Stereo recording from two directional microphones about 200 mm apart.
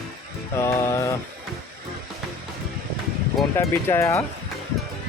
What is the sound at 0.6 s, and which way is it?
Speech, 15° left (ahead or behind).